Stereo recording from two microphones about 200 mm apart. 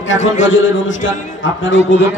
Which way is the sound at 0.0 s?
70° left (ahead or behind).